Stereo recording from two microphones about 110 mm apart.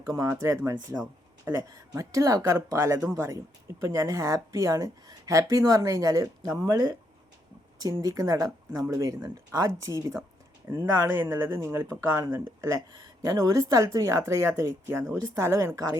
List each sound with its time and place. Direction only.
0.0 s speech: 30° right (ahead or behind)
7.8 s speech: 35° right (ahead or behind)